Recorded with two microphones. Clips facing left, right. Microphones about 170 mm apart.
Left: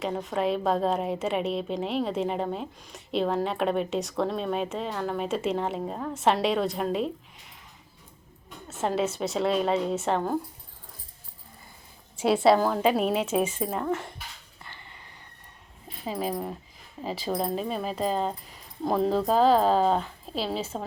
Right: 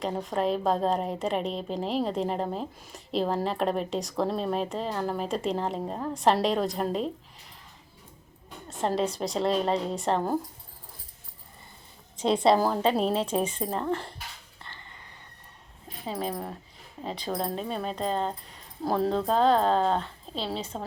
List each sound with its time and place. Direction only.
0.0 s a woman's voice: centre (ahead or behind)
9.0 s a woman's voice: 5° left (ahead or behind)
12.1 s a woman's voice: 5° left (ahead or behind)
12.5 s a woman's voice: 5° right (ahead or behind)
12.8 s a woman's voice: 10° left (ahead or behind)
14.6 s a sound: 15° left (ahead or behind)
16.0 s a woman's voice: 5° left (ahead or behind)